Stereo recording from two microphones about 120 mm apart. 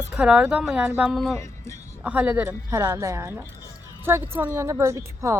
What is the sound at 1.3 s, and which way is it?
Speech, 25° left (ahead or behind).